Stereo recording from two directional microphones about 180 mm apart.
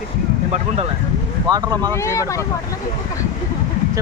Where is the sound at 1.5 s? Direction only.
25° right (ahead or behind).